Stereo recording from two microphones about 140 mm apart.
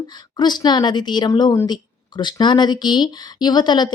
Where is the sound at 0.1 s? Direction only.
30° left (ahead or behind).